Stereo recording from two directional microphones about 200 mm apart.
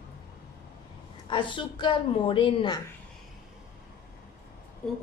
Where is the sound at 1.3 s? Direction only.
25° left (ahead or behind).